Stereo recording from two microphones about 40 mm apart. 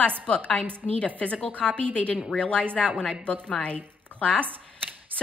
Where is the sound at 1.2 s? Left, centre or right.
Left.